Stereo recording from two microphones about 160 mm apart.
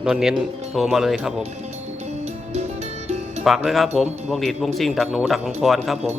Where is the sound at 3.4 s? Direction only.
Centre (ahead or behind).